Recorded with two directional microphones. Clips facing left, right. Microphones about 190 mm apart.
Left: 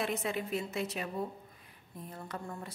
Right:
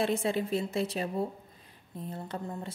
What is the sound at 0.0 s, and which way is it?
A woman's voice, 30° right (ahead or behind).